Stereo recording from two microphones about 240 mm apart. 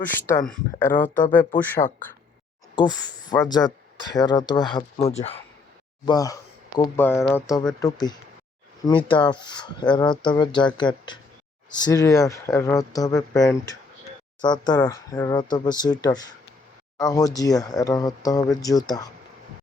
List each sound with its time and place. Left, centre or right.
0.0 s speech: centre
1.8 s speech: left
2.7 s speech: centre
6.1 s speech: centre